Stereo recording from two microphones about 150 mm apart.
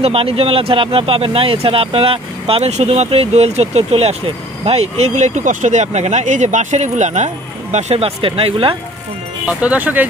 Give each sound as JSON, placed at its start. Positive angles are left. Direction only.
{"t": 0.0, "sound": "speech", "side_deg": -40}
{"t": 9.5, "sound": "speech", "side_deg": -10}